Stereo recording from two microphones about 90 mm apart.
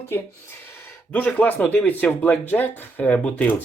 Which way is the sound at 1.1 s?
20° left (ahead or behind).